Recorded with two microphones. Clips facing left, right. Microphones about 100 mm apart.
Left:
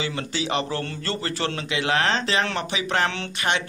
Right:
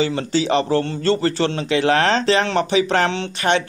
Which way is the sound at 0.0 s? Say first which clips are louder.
Right 8 dB; 35° right (ahead or behind).